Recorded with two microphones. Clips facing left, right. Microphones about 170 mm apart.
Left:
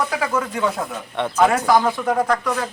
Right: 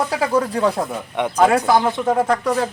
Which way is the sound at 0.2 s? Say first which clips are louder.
Right 4 dB; 35° right (ahead or behind).